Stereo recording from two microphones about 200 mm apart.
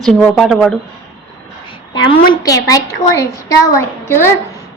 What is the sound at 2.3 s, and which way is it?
A woman's voice, 20° left (ahead or behind).